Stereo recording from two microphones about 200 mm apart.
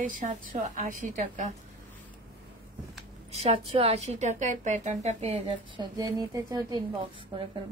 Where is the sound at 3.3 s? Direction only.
30° right (ahead or behind).